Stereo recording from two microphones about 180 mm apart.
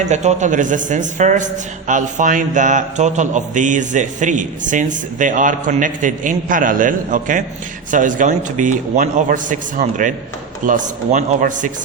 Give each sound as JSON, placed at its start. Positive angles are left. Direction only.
{"t": 0.0, "sound": "a man's voice", "side_deg": -40}